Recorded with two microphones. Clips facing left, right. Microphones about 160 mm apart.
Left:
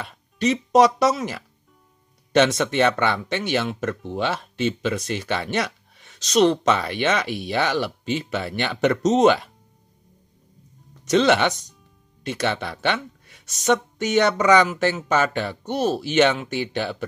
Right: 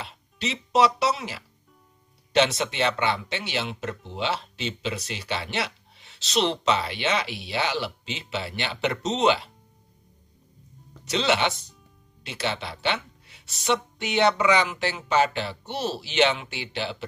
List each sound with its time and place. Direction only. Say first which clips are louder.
0.0 s speech: left 9 dB; 50° left (ahead or behind)
11.1 s speech: left 6 dB; 50° left (ahead or behind)